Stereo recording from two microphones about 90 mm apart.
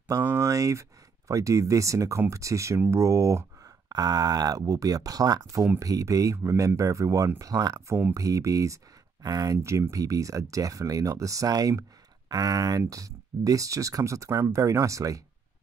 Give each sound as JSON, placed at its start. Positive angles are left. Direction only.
{"t": 0.4, "sound": "speech", "side_deg": -35}